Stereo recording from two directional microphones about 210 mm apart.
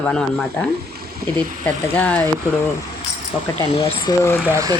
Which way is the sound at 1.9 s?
5° left (ahead or behind).